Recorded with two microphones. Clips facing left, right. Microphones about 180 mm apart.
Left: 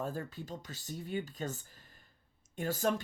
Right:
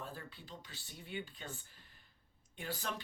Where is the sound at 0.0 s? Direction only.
45° left (ahead or behind).